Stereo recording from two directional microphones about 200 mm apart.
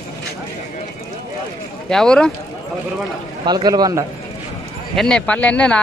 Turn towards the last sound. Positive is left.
turn(degrees=5)  # may be behind; listen again after turning